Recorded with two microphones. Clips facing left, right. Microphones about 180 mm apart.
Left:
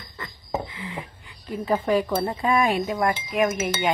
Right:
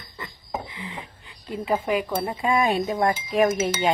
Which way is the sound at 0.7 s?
20° right (ahead or behind).